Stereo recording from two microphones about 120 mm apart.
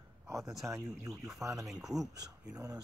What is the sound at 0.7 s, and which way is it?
Speech, 30° right (ahead or behind).